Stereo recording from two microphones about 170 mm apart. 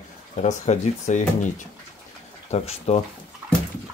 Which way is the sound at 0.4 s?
45° left (ahead or behind).